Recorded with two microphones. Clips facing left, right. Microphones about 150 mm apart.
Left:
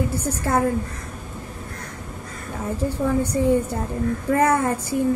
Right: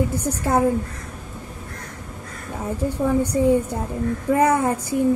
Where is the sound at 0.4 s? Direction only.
15° right (ahead or behind).